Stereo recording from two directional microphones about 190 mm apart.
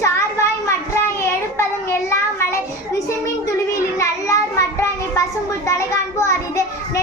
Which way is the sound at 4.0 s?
15° left (ahead or behind).